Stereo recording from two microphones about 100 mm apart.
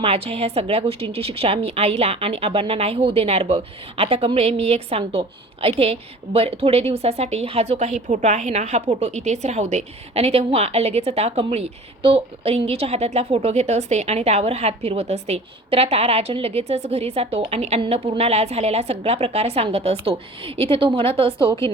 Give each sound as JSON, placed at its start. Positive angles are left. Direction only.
{"t": 0.0, "sound": "a woman's voice", "side_deg": -90}